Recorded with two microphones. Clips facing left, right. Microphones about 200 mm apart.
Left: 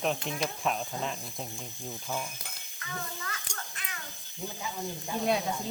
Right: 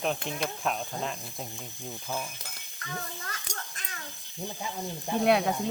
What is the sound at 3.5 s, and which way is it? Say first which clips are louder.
Children playing: right 2 dB; 40° right (ahead or behind).